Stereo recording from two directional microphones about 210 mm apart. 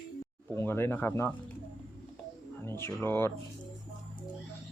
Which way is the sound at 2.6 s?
10° left (ahead or behind).